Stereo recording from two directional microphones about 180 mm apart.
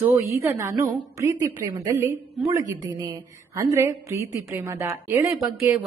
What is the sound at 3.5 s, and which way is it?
A woman's voice, 15° right (ahead or behind).